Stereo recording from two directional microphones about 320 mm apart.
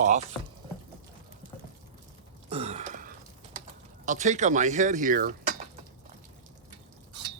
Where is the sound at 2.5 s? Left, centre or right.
Centre.